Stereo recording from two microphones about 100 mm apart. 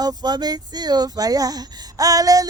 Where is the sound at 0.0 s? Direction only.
40° right (ahead or behind).